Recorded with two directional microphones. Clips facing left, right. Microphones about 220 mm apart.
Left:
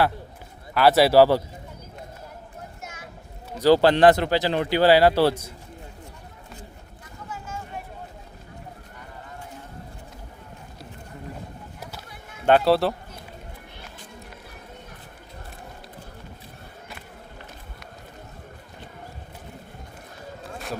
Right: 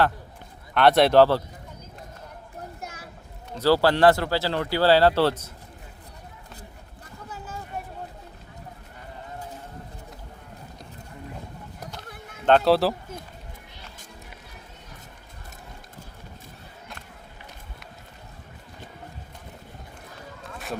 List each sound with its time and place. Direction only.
0.7 s speech: 5° left (ahead or behind)
2.8 s a sound: 35° right (ahead or behind)
3.5 s speech: 15° left (ahead or behind)
7.3 s a sound: 35° right (ahead or behind)
11.8 s boat: 5° left (ahead or behind)
12.5 s speech: 5° left (ahead or behind)